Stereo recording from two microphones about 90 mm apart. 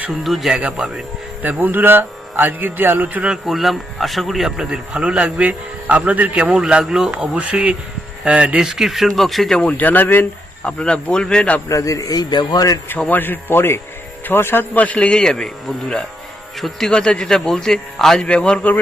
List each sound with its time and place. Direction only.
0.1 s speech: centre (ahead or behind)
1.4 s speech: 20° right (ahead or behind)
3.4 s speech: centre (ahead or behind)
9.6 s speech: 20° left (ahead or behind)
10.6 s a man's voice: 10° left (ahead or behind)
11.7 s speech: 40° left (ahead or behind)
13.1 s a man's voice: 20° left (ahead or behind)
16.6 s a man's voice: centre (ahead or behind)